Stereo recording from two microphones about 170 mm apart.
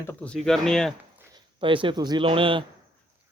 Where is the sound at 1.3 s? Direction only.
30° right (ahead or behind).